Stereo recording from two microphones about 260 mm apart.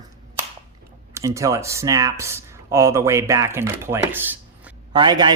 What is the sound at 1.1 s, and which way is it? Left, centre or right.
Speech, centre.